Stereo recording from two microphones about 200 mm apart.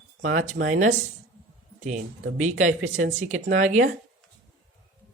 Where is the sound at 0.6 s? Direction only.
60° right (ahead or behind).